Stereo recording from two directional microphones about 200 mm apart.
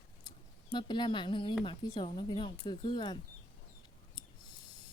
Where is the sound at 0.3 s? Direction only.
20° left (ahead or behind).